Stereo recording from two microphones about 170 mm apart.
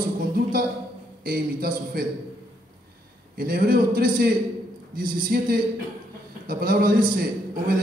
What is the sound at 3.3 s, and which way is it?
A man's voice, 60° right (ahead or behind).